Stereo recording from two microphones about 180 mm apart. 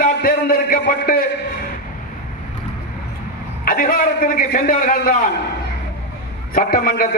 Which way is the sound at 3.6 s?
50° left (ahead or behind).